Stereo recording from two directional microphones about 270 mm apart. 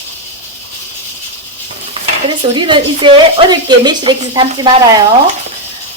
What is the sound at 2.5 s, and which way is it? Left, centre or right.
A woman's voice, centre.